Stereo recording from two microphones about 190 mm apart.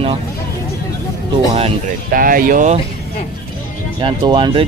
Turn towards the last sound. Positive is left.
turn(degrees=-25)  # may be behind; listen again after turning